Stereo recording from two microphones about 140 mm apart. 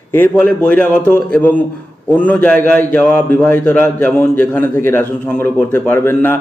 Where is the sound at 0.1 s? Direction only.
15° left (ahead or behind).